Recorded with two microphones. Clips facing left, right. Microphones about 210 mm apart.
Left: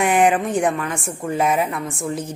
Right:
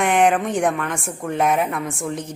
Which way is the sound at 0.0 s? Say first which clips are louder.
Left 1 dB; 5° left (ahead or behind).